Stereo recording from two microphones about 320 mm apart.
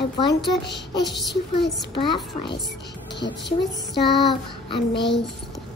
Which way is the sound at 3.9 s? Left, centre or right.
Centre.